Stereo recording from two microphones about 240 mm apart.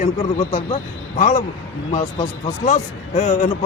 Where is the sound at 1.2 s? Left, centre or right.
Left.